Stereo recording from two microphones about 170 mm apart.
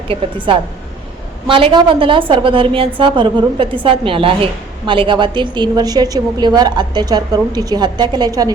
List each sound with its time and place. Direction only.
0.1 s a woman's voice: 30° right (ahead or behind)